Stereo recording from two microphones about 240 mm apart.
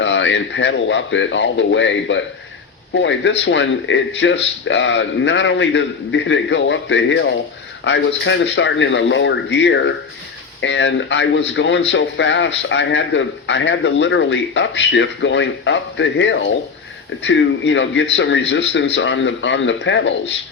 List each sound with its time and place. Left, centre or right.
0.0 s speech: left